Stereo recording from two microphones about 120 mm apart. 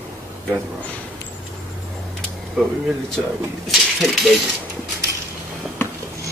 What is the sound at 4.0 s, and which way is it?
Speech, centre (ahead or behind).